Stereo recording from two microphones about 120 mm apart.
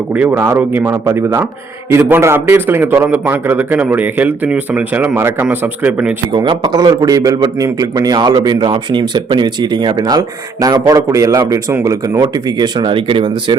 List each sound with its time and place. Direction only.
0.1 s a man's voice: 15° right (ahead or behind)
6.3 s speech: 40° right (ahead or behind)